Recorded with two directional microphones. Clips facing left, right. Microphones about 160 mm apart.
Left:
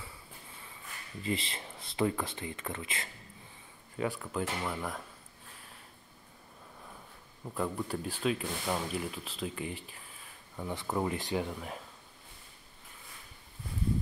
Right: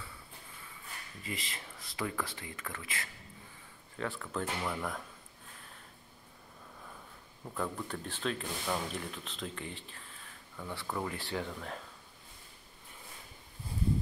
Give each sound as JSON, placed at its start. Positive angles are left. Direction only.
{"t": 1.2, "sound": "speech", "side_deg": 25}
{"t": 4.0, "sound": "speech", "side_deg": 15}
{"t": 7.4, "sound": "speech", "side_deg": 5}